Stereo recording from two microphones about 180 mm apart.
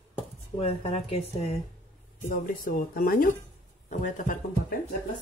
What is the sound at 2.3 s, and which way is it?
Speech, 50° left (ahead or behind).